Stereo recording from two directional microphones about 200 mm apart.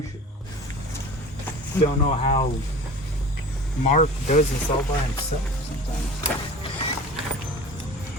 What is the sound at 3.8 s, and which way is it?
Speech, 35° left (ahead or behind).